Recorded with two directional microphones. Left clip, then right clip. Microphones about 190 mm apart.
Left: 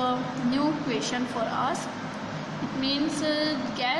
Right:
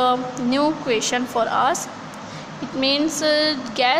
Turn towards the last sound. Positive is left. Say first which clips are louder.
# right 8 dB
turn(degrees=-50)  # may be behind; listen again after turning